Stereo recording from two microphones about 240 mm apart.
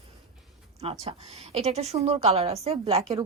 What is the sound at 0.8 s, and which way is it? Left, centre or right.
A woman's voice, right.